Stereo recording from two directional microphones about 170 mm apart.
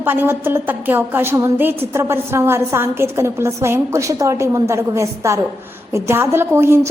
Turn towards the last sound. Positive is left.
turn(degrees=-15)  # may be behind; listen again after turning